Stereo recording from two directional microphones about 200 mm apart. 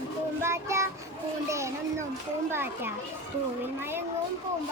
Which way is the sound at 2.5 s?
10° right (ahead or behind).